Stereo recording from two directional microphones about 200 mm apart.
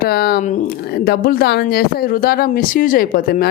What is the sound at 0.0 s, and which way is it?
A woman's voice, 50° left (ahead or behind).